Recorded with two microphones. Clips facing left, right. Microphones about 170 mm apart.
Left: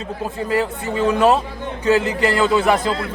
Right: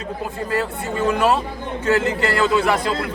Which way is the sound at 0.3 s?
15° left (ahead or behind).